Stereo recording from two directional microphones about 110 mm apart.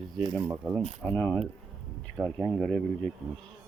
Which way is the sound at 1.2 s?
10° left (ahead or behind).